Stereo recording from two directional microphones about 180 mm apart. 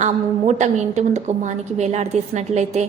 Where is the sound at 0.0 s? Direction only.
40° right (ahead or behind).